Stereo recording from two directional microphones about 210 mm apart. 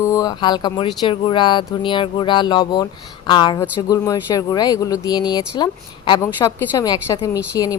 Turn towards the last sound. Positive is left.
turn(degrees=15)  # may be behind; listen again after turning